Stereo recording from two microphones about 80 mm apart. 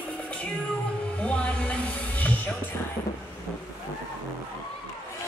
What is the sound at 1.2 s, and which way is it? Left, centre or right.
Music, centre.